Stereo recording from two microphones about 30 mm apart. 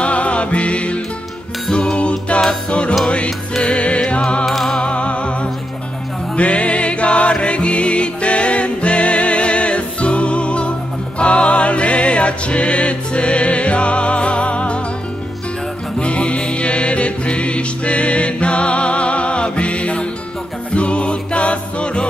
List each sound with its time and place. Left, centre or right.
0.0 s music: left
1.7 s music: left
3.5 s music: left
4.5 s music: centre
4.9 s music: left
16.0 s music: left